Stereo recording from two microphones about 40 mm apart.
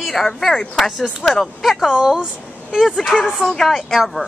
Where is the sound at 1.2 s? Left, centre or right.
Left.